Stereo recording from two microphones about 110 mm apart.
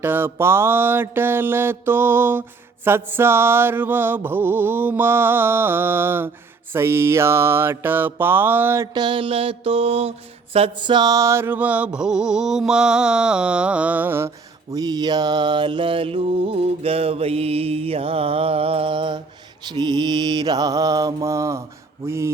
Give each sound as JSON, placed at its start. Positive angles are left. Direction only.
{"t": 0.0, "sound": "mantra", "side_deg": -20}
{"t": 8.9, "sound": "mantra", "side_deg": -45}
{"t": 10.9, "sound": "mantra", "side_deg": -35}